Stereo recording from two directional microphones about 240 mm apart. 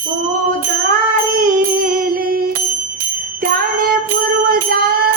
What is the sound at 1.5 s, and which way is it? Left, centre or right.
Music, right.